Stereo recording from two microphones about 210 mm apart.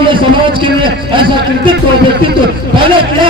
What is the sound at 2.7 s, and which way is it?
Speech, 25° right (ahead or behind).